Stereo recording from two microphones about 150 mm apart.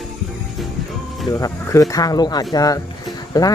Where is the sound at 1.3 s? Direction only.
20° left (ahead or behind).